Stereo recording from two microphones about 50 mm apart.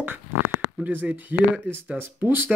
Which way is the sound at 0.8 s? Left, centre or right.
Right.